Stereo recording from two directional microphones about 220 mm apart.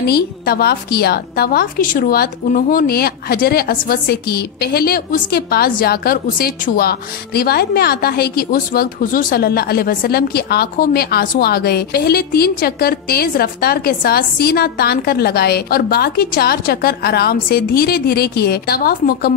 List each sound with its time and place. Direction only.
0.0 s a woman's voice: 45° left (ahead or behind)